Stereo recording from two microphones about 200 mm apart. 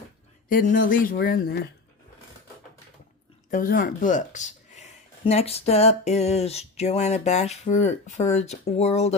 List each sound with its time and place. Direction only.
0.4 s speech: 40° left (ahead or behind)
3.5 s speech: 45° left (ahead or behind)